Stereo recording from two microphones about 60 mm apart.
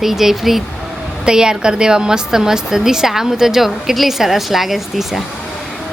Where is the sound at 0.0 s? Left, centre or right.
Centre.